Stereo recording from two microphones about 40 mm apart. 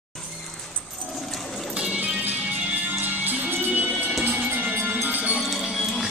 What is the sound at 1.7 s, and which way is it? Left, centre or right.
Music, right.